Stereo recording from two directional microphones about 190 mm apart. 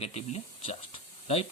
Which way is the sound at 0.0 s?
35° left (ahead or behind).